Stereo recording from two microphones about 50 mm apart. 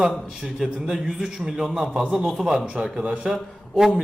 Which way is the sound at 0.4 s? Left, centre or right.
Centre.